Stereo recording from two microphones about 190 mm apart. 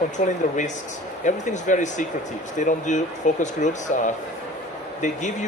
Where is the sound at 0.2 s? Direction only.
40° left (ahead or behind).